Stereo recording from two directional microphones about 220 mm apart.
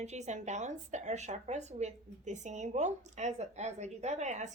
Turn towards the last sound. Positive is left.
turn(degrees=-30)  # may be behind; listen again after turning